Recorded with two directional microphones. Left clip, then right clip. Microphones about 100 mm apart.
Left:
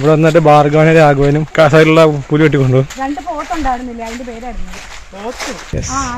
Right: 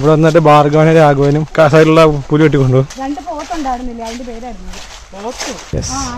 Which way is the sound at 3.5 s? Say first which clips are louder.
Left 1 dB; 25° right (ahead or behind).